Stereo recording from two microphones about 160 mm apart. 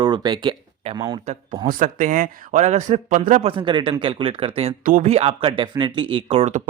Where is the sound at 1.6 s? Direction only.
55° right (ahead or behind).